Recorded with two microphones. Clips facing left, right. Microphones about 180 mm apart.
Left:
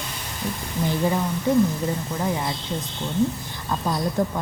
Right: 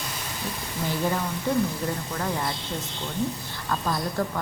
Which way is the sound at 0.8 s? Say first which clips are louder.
Left 4 dB; 15° left (ahead or behind).